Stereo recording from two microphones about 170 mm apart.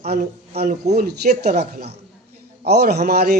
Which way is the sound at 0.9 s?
70° right (ahead or behind).